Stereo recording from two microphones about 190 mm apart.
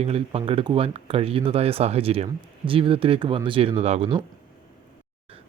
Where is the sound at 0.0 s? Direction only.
30° right (ahead or behind).